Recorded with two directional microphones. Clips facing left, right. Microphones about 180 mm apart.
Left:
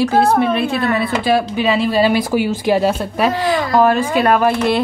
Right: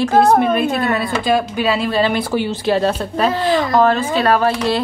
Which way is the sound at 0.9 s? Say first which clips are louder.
Left 1 dB; centre (ahead or behind).